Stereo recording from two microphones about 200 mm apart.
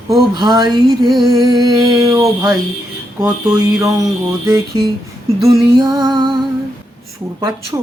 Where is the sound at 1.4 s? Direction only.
20° right (ahead or behind).